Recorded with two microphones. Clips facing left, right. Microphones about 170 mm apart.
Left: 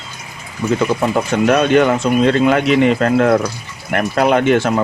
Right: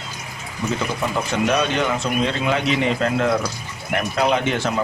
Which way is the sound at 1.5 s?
55° left (ahead or behind).